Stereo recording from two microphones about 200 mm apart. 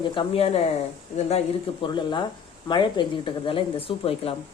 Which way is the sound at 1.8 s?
25° left (ahead or behind).